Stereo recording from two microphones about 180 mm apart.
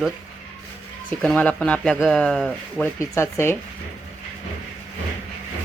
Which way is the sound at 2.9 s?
15° left (ahead or behind).